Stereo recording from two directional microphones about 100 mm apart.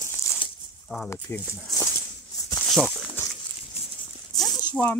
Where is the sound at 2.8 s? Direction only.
15° left (ahead or behind).